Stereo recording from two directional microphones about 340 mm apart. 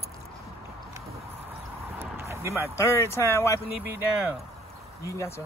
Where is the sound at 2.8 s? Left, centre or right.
Centre.